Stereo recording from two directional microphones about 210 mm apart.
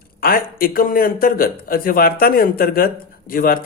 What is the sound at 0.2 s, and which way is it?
Speech, 45° left (ahead or behind).